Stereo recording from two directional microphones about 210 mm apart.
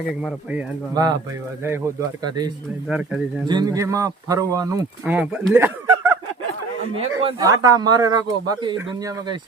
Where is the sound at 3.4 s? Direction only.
20° right (ahead or behind).